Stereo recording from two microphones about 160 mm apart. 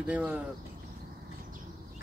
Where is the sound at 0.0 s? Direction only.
10° right (ahead or behind).